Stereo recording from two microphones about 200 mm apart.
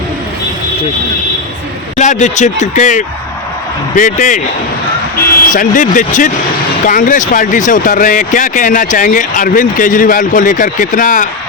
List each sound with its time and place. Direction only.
2.0 s speech: 35° left (ahead or behind)
5.5 s speech: 40° left (ahead or behind)